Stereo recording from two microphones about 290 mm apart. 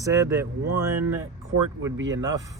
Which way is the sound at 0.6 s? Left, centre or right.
Right.